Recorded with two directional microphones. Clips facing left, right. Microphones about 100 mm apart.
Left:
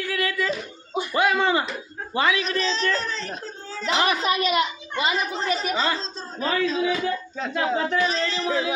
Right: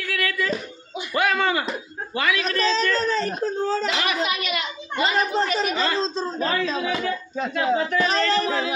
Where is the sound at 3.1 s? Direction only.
55° right (ahead or behind).